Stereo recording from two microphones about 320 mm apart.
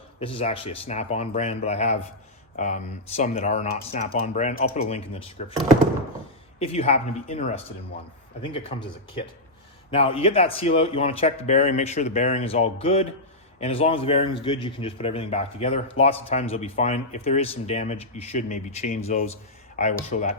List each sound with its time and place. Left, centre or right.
0.2 s a man's voice: centre
6.6 s a man's voice: centre
9.9 s a man's voice: centre